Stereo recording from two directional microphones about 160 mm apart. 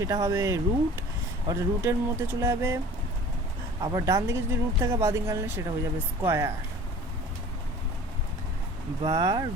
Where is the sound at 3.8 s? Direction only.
20° right (ahead or behind).